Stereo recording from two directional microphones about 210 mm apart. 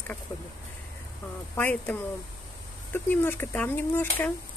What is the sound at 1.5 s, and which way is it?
Speech, 10° left (ahead or behind).